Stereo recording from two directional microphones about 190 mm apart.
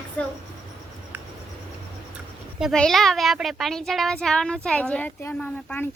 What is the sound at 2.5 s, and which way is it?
A child's voice, centre (ahead or behind).